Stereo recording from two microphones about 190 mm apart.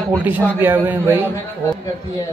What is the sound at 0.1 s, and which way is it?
A man's voice, 10° right (ahead or behind).